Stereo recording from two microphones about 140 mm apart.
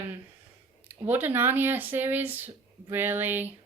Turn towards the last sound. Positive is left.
turn(degrees=-15)  # may be behind; listen again after turning